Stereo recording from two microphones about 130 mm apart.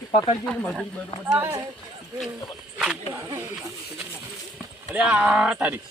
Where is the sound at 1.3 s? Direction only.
15° right (ahead or behind).